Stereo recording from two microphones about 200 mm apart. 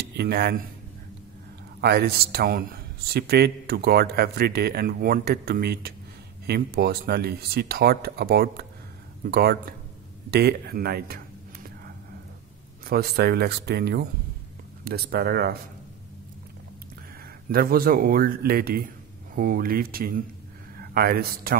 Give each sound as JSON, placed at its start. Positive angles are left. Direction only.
{"t": 0.0, "sound": "speech", "side_deg": -55}
{"t": 1.8, "sound": "a man's voice", "side_deg": -55}
{"t": 10.3, "sound": "whispering", "side_deg": -50}
{"t": 12.8, "sound": "a man's voice", "side_deg": -50}
{"t": 17.5, "sound": "a man's voice", "side_deg": -45}